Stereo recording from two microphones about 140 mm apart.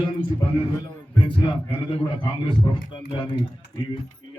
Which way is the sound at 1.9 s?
40° left (ahead or behind).